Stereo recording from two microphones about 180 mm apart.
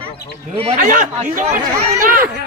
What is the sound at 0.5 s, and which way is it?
Speech, 35° right (ahead or behind).